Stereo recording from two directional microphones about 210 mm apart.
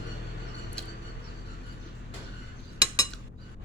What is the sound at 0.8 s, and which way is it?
Tick, 5° left (ahead or behind).